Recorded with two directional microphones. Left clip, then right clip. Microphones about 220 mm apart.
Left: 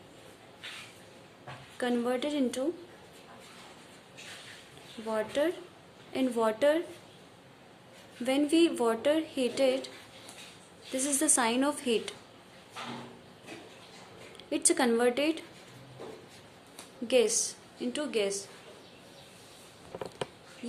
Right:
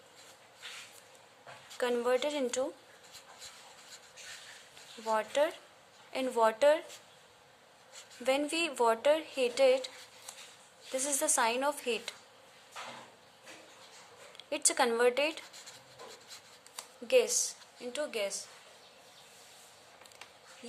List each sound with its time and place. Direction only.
1.8 s speech: 30° right (ahead or behind)
5.0 s speech: 25° right (ahead or behind)
8.2 s speech: 25° right (ahead or behind)
10.9 s speech: 25° right (ahead or behind)
14.5 s speech: 25° right (ahead or behind)
17.1 s speech: 20° right (ahead or behind)